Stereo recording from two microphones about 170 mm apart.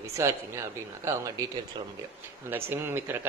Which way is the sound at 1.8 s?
30° right (ahead or behind).